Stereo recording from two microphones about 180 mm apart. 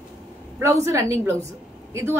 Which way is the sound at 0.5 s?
15° right (ahead or behind).